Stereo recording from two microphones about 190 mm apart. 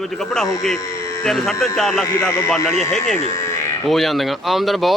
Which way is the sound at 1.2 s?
Centre (ahead or behind).